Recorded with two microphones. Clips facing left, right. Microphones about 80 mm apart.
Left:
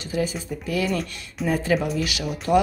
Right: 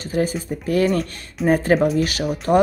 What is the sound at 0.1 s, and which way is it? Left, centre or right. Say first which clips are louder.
Speech: right 4 dB; right.